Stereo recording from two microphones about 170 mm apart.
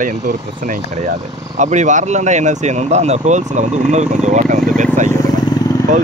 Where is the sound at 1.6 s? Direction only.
45° right (ahead or behind).